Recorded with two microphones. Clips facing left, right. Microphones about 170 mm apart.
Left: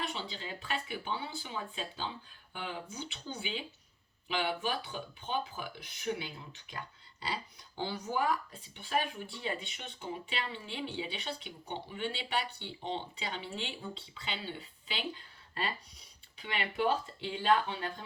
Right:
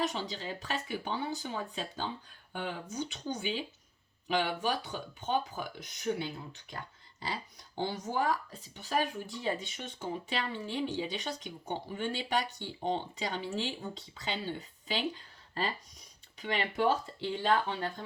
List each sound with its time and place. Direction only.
0.0 s speech: 45° right (ahead or behind)
7.9 s speech: 40° right (ahead or behind)
16.4 s speech: 40° right (ahead or behind)